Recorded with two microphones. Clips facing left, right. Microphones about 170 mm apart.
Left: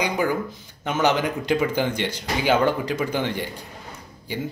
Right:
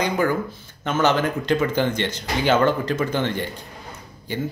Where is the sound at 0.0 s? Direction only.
10° left (ahead or behind).